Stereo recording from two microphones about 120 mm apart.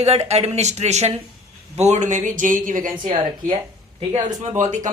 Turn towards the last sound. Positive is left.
turn(degrees=-90)